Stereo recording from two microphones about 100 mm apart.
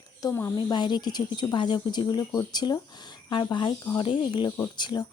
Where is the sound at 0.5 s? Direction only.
50° left (ahead or behind).